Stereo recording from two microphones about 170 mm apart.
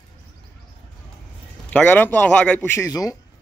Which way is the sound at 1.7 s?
10° left (ahead or behind).